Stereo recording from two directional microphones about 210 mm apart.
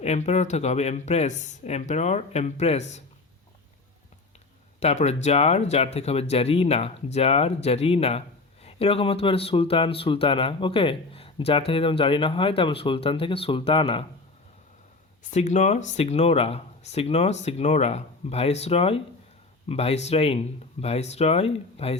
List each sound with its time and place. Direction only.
0.0 s speech: 30° left (ahead or behind)
4.8 s speech: 30° left (ahead or behind)
15.3 s speech: 35° left (ahead or behind)